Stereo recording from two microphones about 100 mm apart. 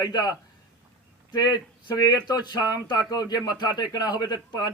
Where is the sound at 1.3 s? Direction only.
45° left (ahead or behind).